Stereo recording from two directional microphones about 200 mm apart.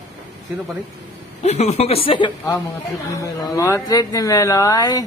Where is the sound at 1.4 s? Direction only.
35° left (ahead or behind).